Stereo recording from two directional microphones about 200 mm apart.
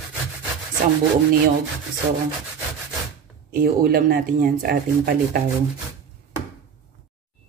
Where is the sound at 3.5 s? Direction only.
50° right (ahead or behind).